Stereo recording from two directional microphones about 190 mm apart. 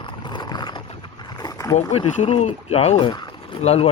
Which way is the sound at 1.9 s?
35° left (ahead or behind).